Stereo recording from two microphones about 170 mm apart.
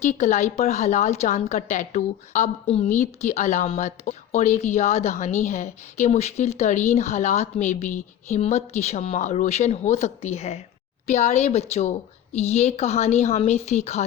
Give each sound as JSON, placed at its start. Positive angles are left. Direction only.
{"t": 0.0, "sound": "a woman's voice", "side_deg": 45}